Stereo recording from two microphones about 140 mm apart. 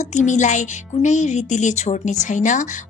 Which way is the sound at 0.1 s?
60° left (ahead or behind).